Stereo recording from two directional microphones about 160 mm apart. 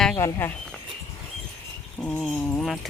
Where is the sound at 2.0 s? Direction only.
5° left (ahead or behind).